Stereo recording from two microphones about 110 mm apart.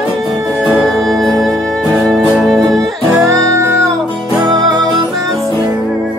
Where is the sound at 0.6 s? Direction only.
Centre (ahead or behind).